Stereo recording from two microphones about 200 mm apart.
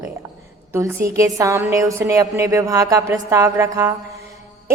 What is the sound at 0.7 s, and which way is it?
A woman's voice, 15° right (ahead or behind).